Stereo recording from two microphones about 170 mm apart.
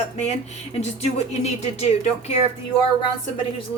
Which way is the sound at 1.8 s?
40° left (ahead or behind).